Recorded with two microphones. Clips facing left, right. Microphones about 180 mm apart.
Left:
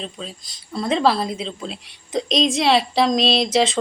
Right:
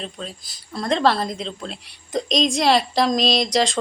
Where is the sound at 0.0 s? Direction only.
Centre (ahead or behind).